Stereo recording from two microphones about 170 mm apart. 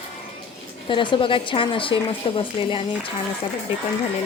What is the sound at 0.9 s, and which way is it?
Speech, 30° left (ahead or behind).